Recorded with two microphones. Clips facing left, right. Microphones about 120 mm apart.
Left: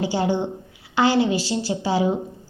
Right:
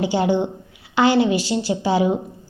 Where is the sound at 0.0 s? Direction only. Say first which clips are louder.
Right 3 dB; 20° right (ahead or behind).